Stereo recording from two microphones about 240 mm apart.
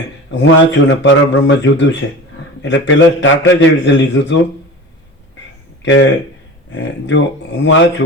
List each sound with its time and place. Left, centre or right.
0.3 s speech: left
5.8 s speech: left
7.1 s speech: left